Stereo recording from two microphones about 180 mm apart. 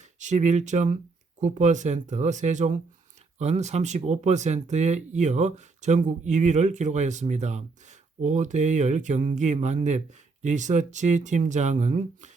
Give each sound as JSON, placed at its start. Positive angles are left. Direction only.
{"t": 0.2, "sound": "speech", "side_deg": -40}